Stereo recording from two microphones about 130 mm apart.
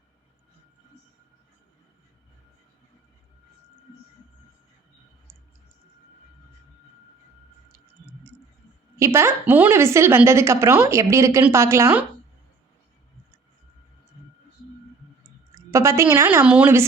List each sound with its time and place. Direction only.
9.0 s a woman's voice: 20° right (ahead or behind)
15.2 s a woman's voice: 20° right (ahead or behind)